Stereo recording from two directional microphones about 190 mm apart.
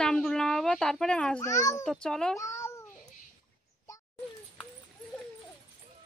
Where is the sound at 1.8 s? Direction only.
5° left (ahead or behind).